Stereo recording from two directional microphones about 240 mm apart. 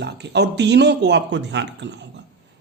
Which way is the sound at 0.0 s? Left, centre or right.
Right.